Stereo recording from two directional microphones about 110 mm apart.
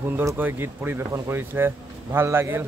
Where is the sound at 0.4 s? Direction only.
20° right (ahead or behind).